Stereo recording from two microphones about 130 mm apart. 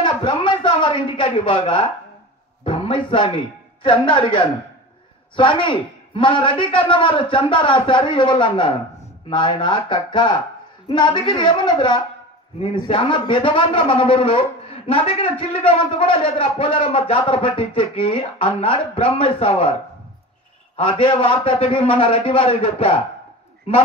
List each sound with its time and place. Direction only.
0.0 s a man's voice: 40° left (ahead or behind)
20.7 s a man's voice: 45° left (ahead or behind)